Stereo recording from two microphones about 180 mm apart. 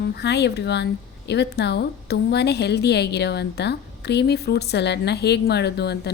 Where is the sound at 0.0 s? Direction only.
70° left (ahead or behind).